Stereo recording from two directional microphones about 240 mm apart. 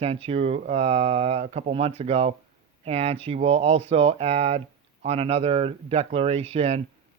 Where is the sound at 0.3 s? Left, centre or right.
Right.